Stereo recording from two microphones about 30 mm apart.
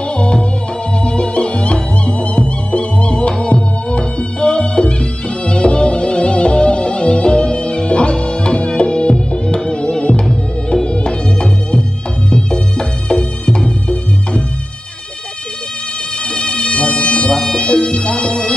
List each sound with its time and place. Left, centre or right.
0.0 s music: left
16.3 s music: left